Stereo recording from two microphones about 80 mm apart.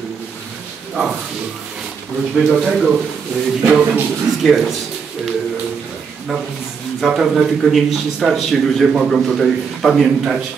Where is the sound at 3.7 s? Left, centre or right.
Centre.